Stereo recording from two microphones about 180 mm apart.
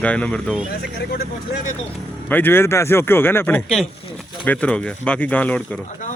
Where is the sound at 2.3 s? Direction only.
10° left (ahead or behind).